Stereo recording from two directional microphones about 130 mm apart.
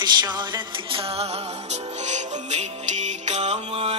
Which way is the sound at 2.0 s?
65° right (ahead or behind).